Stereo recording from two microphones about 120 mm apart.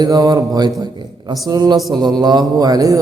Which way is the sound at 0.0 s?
30° right (ahead or behind).